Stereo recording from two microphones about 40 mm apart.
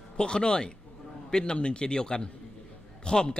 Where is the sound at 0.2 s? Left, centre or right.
Left.